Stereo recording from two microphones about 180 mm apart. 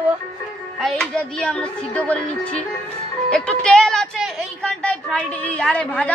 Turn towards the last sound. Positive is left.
turn(degrees=5)  # may be behind; listen again after turning